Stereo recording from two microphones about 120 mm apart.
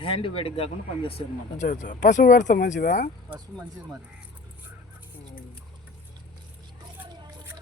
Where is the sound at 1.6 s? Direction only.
90° left.